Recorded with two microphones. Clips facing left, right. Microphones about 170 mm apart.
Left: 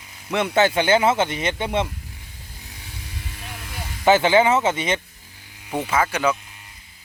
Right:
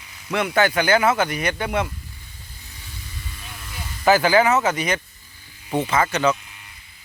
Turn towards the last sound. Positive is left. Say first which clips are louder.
# right 1 dB
turn(degrees=10)  # may be behind; listen again after turning